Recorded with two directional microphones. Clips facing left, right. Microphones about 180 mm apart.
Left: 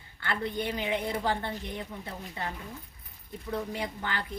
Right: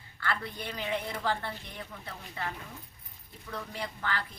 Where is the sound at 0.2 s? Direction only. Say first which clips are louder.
Left 4 dB; 25° left (ahead or behind).